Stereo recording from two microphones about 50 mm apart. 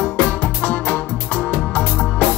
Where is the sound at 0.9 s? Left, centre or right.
Left.